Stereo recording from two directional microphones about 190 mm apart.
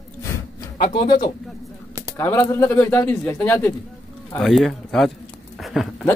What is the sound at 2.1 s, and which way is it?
A man's voice, 15° left (ahead or behind).